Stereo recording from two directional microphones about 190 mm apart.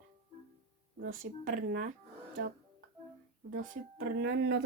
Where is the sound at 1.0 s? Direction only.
50° right (ahead or behind).